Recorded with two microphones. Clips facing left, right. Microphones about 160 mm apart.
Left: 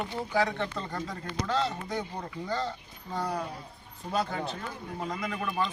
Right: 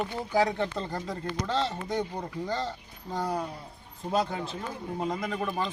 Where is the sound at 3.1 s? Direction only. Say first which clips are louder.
Right 2 dB; 20° right (ahead or behind).